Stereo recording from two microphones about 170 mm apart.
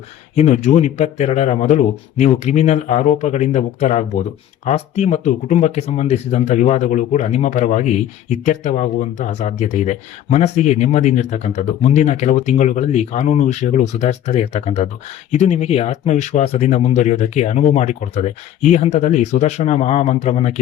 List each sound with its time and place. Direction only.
0.3 s speech: 45° left (ahead or behind)